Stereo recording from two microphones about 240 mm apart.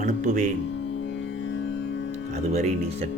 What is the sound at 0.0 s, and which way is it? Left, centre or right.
Music, right.